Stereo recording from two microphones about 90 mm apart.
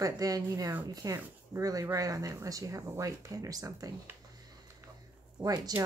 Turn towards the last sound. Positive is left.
turn(degrees=-45)  # may be behind; listen again after turning